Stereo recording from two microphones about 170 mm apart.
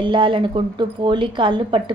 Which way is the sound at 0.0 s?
30° right (ahead or behind).